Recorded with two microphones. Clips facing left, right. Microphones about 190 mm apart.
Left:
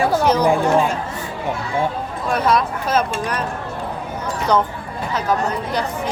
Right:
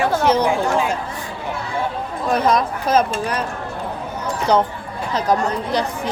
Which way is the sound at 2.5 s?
40° right (ahead or behind).